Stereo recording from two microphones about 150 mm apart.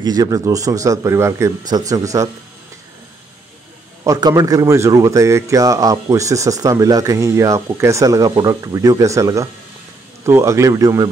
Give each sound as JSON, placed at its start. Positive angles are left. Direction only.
{"t": 0.0, "sound": "speech", "side_deg": -25}
{"t": 4.0, "sound": "speech", "side_deg": -25}